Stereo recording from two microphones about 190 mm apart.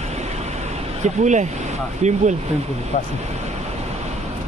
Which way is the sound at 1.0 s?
40° right (ahead or behind).